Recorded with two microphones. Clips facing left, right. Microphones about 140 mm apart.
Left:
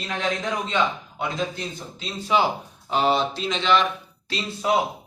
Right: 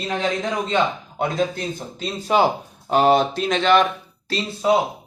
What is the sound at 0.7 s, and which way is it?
A man's voice, 45° right (ahead or behind).